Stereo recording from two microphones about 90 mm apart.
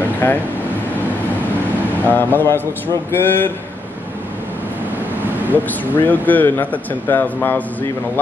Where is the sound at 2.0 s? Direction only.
20° left (ahead or behind).